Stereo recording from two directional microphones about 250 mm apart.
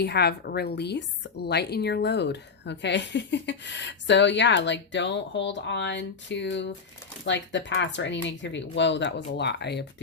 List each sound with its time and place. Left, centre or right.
0.0 s a woman's voice: left